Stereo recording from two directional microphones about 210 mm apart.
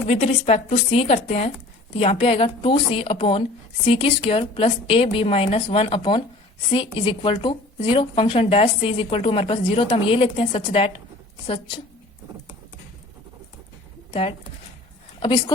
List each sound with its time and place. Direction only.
0.1 s speech: 30° left (ahead or behind)
14.1 s speech: 25° left (ahead or behind)